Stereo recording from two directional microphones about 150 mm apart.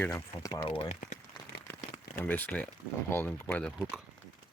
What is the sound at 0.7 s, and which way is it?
Speech, 40° left (ahead or behind).